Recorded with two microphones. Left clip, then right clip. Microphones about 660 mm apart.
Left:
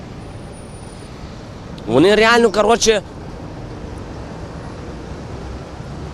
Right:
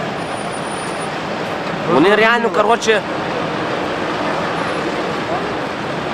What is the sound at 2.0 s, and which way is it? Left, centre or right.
Speech, left.